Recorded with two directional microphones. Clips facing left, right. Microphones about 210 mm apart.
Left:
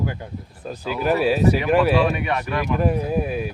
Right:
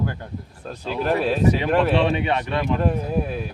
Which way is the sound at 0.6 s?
5° left (ahead or behind).